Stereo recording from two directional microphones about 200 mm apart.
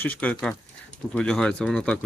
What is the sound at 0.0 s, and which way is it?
Speech, 10° left (ahead or behind).